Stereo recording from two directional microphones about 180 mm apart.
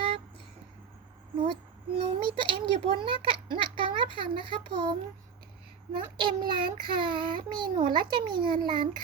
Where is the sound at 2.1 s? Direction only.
30° right (ahead or behind).